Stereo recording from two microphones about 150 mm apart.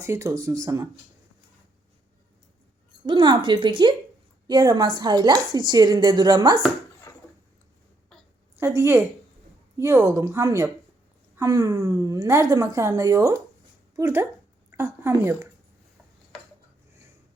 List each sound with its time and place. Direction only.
0.0 s a woman's voice: 20° right (ahead or behind)
3.1 s a woman's voice: 30° right (ahead or behind)
8.5 s a woman's voice: 15° right (ahead or behind)